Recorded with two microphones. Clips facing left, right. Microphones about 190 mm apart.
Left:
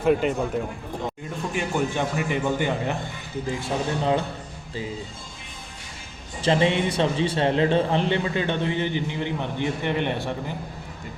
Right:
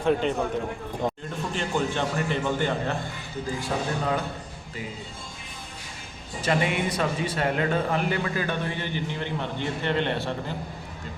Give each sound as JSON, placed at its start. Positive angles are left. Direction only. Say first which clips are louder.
{"t": 0.0, "sound": "a man's voice", "louder": "left 3 dB", "side_deg": 5}
{"t": 1.5, "sound": "a man's voice", "louder": "left 2 dB", "side_deg": 10}
{"t": 3.4, "sound": "a man's voice", "louder": "left 2 dB", "side_deg": 25}
{"t": 6.4, "sound": "a man's voice", "louder": "left 4 dB", "side_deg": 25}